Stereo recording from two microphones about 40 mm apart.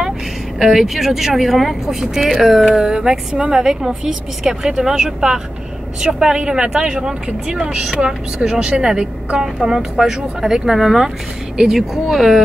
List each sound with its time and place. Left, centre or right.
0.6 s speech: centre
2.7 s a woman's voice: centre
9.4 s speech: centre